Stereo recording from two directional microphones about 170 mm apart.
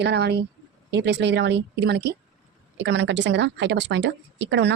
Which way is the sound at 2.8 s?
90° right.